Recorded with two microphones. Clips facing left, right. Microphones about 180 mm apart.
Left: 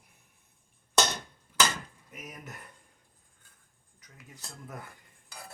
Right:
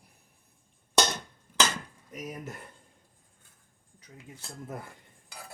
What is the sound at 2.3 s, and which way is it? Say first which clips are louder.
Speech: right 6 dB; 30° right (ahead or behind).